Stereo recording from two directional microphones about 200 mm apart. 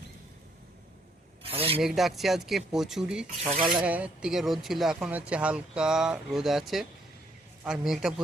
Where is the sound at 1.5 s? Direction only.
30° right (ahead or behind).